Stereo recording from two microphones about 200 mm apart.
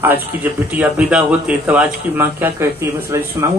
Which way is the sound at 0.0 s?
10° right (ahead or behind).